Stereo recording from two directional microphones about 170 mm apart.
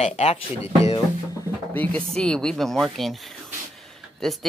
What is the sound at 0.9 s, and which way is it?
Music, 20° left (ahead or behind).